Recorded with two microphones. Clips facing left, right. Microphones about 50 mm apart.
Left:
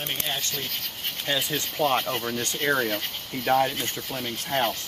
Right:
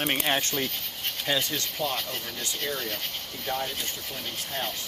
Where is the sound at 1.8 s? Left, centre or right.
Left.